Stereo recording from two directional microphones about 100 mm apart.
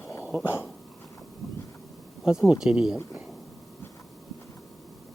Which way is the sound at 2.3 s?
5° right (ahead or behind).